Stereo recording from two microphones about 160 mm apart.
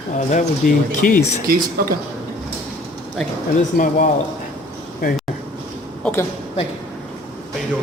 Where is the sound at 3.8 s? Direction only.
65° left (ahead or behind).